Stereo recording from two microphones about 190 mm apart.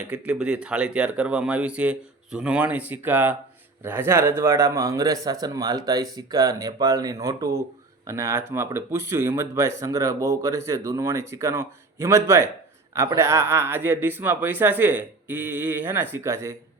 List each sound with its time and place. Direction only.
0.1 s a man's voice: 5° right (ahead or behind)